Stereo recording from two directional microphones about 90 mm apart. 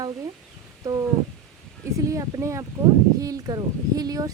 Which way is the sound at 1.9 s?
40° right (ahead or behind).